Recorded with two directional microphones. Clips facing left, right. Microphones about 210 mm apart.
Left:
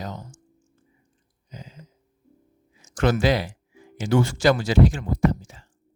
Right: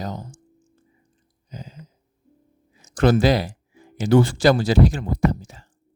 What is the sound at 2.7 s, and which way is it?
Speech, 35° right (ahead or behind).